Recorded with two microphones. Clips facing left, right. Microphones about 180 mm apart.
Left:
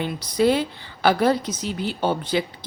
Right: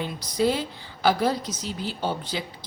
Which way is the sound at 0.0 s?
65° left (ahead or behind).